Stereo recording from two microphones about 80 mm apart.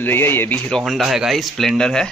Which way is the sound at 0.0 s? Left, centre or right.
Left.